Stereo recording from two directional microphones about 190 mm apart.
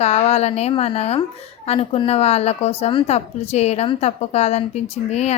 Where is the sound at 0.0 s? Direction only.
35° left (ahead or behind).